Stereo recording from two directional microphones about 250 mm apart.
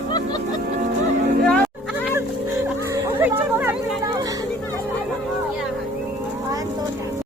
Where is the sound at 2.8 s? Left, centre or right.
Centre.